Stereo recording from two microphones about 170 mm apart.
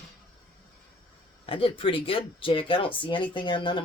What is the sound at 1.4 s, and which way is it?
Speech, 30° left (ahead or behind).